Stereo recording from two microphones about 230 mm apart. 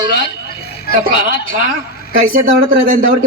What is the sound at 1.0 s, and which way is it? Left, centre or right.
Speech, right.